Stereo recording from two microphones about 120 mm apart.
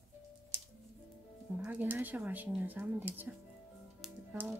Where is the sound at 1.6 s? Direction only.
15° right (ahead or behind).